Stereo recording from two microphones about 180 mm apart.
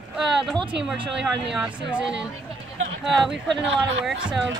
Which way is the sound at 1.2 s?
5° right (ahead or behind).